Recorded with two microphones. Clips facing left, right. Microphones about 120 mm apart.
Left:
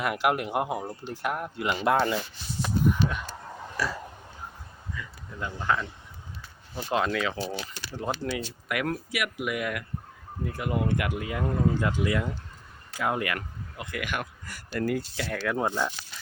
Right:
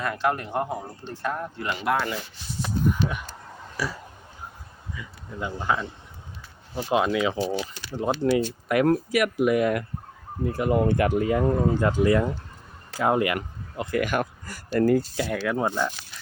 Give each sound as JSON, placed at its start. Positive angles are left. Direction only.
{"t": 0.0, "sound": "speech", "side_deg": 15}
{"t": 1.7, "sound": "speech", "side_deg": 30}
{"t": 3.8, "sound": "speech", "side_deg": -10}
{"t": 4.9, "sound": "speech", "side_deg": -15}
{"t": 8.6, "sound": "speech", "side_deg": -35}
{"t": 13.9, "sound": "speech", "side_deg": -40}
{"t": 15.1, "sound": "speech", "side_deg": -15}